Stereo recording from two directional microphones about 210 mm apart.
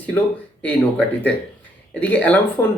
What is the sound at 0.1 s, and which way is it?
Speech, 10° left (ahead or behind).